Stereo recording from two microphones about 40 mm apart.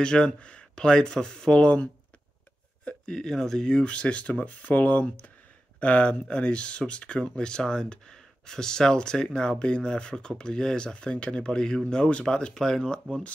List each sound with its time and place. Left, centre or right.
0.0 s speech: left
3.1 s speech: centre
3.6 s speech: left
12.5 s speech: centre